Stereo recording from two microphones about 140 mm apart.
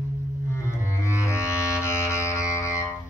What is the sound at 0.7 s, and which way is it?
Music, 20° left (ahead or behind).